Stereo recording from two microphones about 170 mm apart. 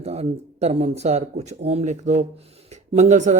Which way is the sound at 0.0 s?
40° right (ahead or behind).